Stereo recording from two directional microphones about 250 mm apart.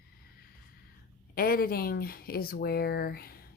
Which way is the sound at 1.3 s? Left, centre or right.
Left.